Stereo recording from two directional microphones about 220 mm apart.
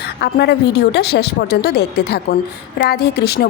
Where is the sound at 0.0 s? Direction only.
50° left (ahead or behind).